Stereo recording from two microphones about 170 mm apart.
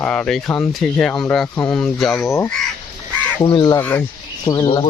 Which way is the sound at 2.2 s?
20° left (ahead or behind).